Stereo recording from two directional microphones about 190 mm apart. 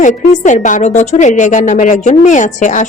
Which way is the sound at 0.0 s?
40° left (ahead or behind).